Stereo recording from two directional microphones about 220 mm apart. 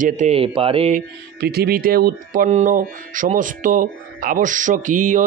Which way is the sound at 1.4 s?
45° right (ahead or behind).